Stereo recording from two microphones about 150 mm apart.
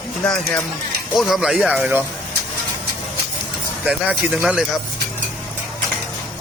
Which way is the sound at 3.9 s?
5° right (ahead or behind).